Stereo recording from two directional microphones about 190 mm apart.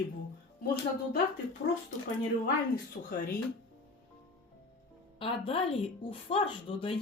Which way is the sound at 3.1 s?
50° left (ahead or behind).